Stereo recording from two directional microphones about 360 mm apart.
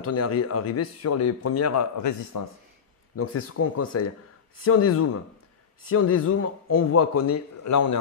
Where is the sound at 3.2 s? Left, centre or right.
Left.